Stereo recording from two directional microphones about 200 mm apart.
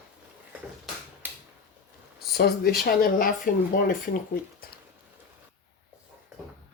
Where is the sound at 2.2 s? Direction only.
50° left (ahead or behind).